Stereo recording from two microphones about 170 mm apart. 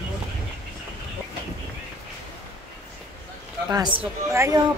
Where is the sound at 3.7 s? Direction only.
25° right (ahead or behind).